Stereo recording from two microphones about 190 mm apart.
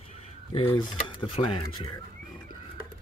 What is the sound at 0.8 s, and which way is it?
Speech, 25° left (ahead or behind).